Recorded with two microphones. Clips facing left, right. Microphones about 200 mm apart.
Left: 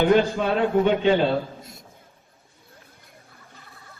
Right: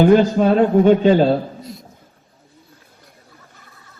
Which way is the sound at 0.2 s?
45° right (ahead or behind).